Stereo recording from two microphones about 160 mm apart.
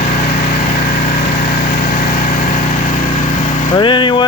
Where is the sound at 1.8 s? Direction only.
55° left (ahead or behind).